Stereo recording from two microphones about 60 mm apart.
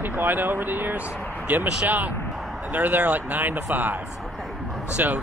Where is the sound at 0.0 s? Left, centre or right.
Right.